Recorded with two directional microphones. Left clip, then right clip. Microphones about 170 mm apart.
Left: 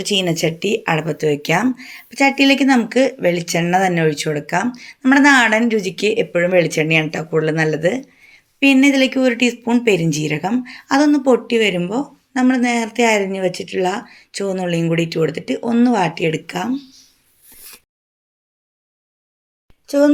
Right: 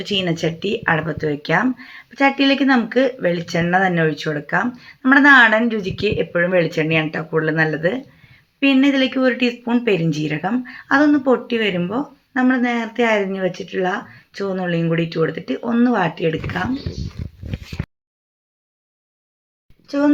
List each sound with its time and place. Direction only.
1.0 s speech: 35° left (ahead or behind)